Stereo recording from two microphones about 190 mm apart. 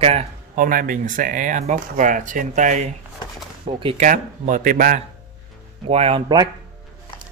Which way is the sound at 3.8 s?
30° right (ahead or behind).